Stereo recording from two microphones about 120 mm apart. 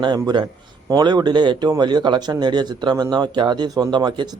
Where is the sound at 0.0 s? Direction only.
40° right (ahead or behind).